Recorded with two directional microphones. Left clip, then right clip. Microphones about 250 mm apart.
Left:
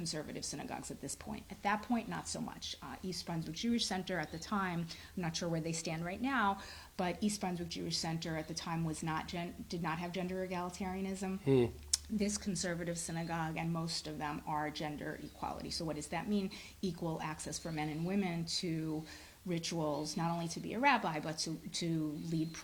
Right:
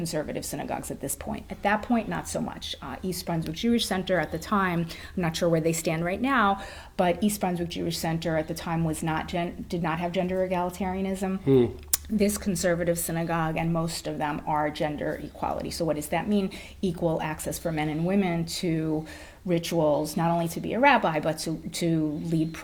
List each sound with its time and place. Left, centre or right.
0.0 s speech: centre
11.4 s speech: left
11.9 s speech: centre